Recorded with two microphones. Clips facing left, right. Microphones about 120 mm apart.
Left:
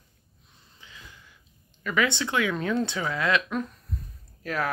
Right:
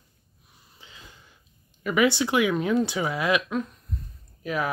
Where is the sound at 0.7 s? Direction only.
20° right (ahead or behind).